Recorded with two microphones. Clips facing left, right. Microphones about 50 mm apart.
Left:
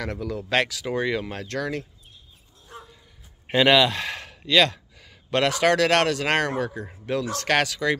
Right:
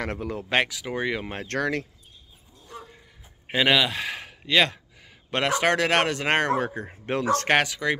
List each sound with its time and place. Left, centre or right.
0.0 s speech: right
0.5 s speech: centre
1.5 s speech: right
3.4 s speech: centre; by 6.5 s right
6.6 s speech: right
7.4 s speech: centre